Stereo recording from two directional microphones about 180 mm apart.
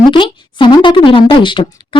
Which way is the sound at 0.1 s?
25° left (ahead or behind).